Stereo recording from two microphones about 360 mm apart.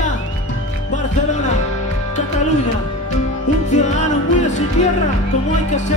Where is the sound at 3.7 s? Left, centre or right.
Centre.